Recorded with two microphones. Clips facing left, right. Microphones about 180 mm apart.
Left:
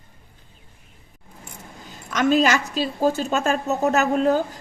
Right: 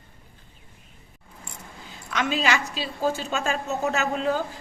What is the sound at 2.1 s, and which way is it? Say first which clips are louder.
A woman's voice: left 6 dB; 45° left (ahead or behind).